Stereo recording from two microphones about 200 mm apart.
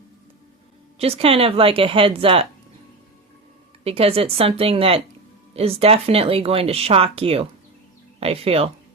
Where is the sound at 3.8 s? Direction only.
30° right (ahead or behind).